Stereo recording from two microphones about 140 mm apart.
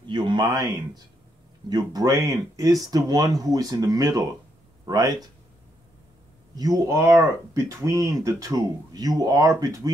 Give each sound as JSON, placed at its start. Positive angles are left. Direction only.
{"t": 0.0, "sound": "speech", "side_deg": -35}
{"t": 6.5, "sound": "speech", "side_deg": -25}